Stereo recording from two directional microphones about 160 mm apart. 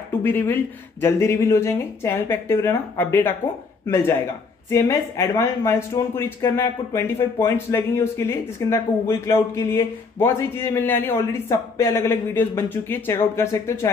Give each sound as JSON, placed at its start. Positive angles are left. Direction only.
{"t": 0.2, "sound": "speech", "side_deg": 10}